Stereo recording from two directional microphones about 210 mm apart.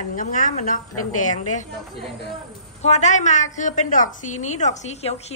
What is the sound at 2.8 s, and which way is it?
A woman's voice, 35° left (ahead or behind).